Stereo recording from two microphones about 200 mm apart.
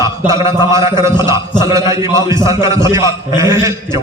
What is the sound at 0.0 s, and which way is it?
A man's voice, 15° right (ahead or behind).